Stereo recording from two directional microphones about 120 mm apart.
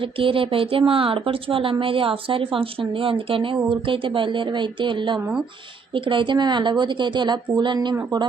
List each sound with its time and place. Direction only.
0.0 s a woman's voice: 45° right (ahead or behind)